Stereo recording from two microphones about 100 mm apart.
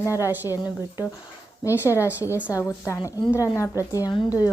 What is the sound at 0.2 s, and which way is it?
Speech, 20° right (ahead or behind).